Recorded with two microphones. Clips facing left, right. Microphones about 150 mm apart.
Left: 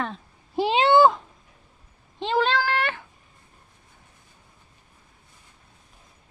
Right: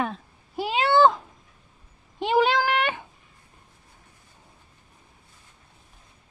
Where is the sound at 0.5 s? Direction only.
25° left (ahead or behind).